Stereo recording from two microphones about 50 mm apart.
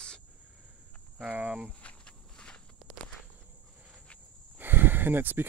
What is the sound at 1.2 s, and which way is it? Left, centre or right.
Speech, right.